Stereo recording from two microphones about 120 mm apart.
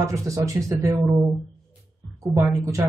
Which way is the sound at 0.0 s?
25° right (ahead or behind).